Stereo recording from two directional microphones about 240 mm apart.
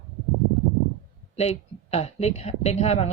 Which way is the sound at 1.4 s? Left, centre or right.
Left.